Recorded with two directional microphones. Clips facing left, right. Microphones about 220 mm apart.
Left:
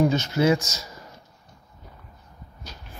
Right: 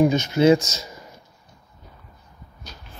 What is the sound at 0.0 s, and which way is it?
Speech, 15° right (ahead or behind).